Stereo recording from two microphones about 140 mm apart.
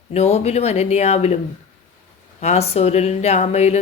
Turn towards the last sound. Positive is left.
turn(degrees=50)  # may be behind; listen again after turning